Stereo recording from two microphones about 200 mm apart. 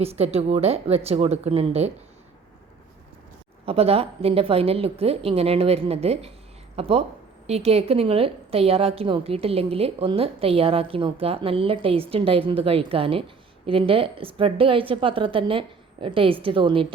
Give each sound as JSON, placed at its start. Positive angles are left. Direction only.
{"t": 0.0, "sound": "a woman's voice", "side_deg": -30}
{"t": 3.7, "sound": "a woman's voice", "side_deg": -30}